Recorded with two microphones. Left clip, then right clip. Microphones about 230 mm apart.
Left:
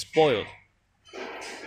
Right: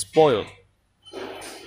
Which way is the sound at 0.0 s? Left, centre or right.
Right.